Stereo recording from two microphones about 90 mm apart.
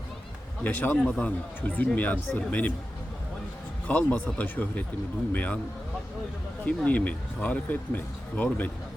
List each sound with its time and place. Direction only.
0.6 s speech: 20° left (ahead or behind)
3.8 s speech: 15° left (ahead or behind)
6.7 s speech: 15° left (ahead or behind)